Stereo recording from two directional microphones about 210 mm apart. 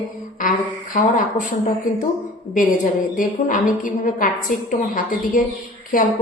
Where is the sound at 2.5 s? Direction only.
40° left (ahead or behind).